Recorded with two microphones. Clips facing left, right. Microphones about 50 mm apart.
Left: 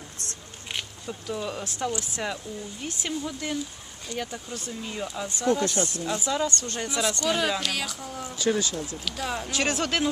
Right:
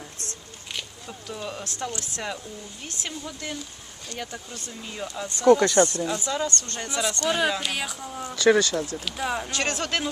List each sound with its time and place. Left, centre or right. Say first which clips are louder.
1.0 s speech: left 5 dB; centre
5.5 s speech: right 8 dB; right
6.1 s speech: left 1 dB; centre
7.3 s speech: right 3 dB; centre
8.4 s speech: right 7 dB; right
9.0 s speech: right 2 dB; centre
9.5 s speech: left 1 dB; centre